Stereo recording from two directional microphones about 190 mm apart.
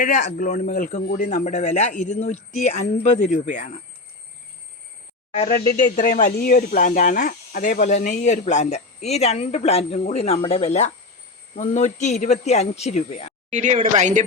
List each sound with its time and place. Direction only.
0.0 s speech: 40° left (ahead or behind)
5.3 s speech: 40° left (ahead or behind)
13.5 s speech: 35° right (ahead or behind)